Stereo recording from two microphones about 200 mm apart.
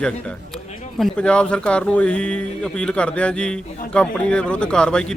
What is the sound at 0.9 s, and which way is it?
Speech, 5° left (ahead or behind).